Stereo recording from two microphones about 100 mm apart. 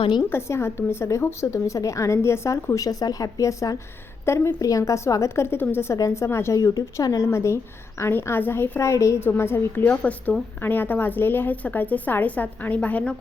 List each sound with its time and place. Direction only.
0.3 s a woman's voice: 25° left (ahead or behind)